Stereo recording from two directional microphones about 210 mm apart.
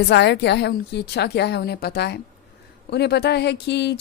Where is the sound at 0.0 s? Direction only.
55° left (ahead or behind).